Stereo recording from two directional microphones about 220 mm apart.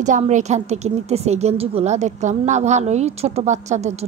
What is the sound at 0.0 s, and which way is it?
A woman's voice, 35° right (ahead or behind).